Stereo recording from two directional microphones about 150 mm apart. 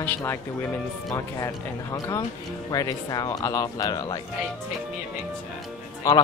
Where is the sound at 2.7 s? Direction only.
25° left (ahead or behind).